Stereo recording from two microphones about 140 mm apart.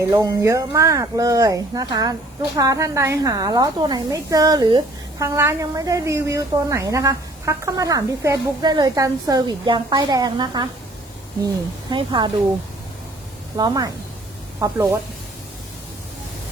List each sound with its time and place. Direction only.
0.1 s a woman's voice: 25° right (ahead or behind)
13.6 s a woman's voice: 25° right (ahead or behind)